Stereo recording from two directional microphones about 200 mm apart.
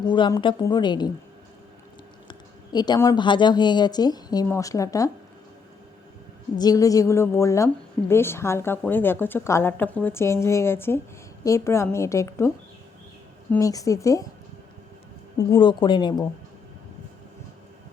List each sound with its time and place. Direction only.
0.0 s a woman's voice: 20° left (ahead or behind)
2.7 s a woman's voice: 20° left (ahead or behind)
6.6 s a woman's voice: 20° left (ahead or behind)
13.5 s a woman's voice: 15° left (ahead or behind)
15.4 s a woman's voice: 25° left (ahead or behind)